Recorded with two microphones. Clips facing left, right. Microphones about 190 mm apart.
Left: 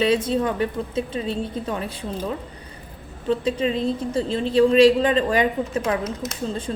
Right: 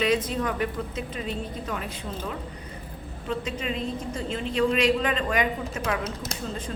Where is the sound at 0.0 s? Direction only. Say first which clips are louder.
Left 5 dB; 30° left (ahead or behind).